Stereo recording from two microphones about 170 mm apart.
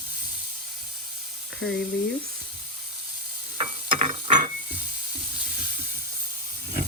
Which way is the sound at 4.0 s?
45° right (ahead or behind).